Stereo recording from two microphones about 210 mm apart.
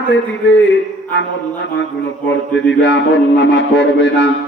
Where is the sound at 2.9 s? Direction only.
60° left (ahead or behind).